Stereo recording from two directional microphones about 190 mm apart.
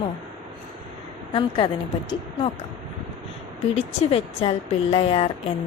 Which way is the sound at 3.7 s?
30° left (ahead or behind).